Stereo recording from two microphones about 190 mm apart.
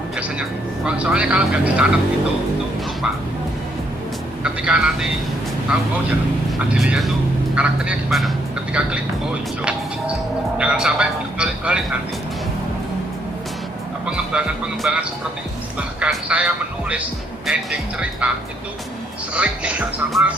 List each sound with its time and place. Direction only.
0.9 s speech: 5° right (ahead or behind)
4.4 s speech: 5° right (ahead or behind)
14.0 s speech: 5° right (ahead or behind)
19.3 s speech: 5° right (ahead or behind)